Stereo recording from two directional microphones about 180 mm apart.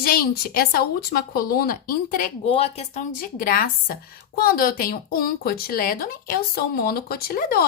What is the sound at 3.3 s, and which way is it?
A woman's voice, 50° left (ahead or behind).